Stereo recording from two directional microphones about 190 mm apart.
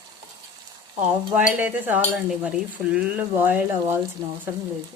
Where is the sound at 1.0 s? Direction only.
10° right (ahead or behind).